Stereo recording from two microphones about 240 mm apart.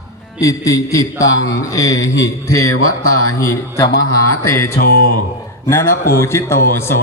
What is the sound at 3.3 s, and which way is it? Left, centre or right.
Speech, centre.